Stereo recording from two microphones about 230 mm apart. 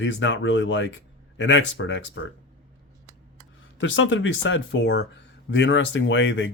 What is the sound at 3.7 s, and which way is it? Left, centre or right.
Speech, left.